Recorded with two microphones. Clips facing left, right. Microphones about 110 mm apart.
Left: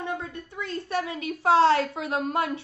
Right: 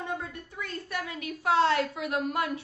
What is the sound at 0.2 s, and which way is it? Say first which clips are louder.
A woman's voice: left 3 dB; 25° left (ahead or behind).